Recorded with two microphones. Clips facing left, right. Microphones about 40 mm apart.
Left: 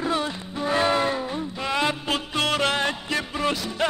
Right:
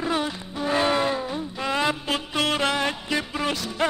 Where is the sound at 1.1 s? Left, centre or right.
Centre.